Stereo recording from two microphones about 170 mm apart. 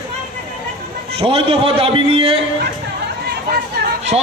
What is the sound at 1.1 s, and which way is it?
A man's voice, 35° right (ahead or behind).